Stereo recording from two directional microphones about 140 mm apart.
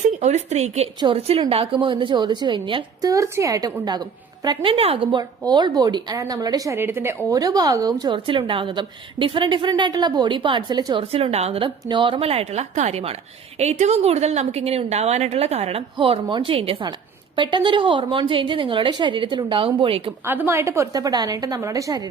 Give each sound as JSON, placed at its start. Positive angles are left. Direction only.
{"t": 0.2, "sound": "a woman's voice", "side_deg": -55}
{"t": 0.9, "sound": "a woman's voice", "side_deg": -40}
{"t": 3.1, "sound": "a woman's voice", "side_deg": -20}
{"t": 11.0, "sound": "a woman's voice", "side_deg": -45}
{"t": 20.2, "sound": "a woman's voice", "side_deg": -15}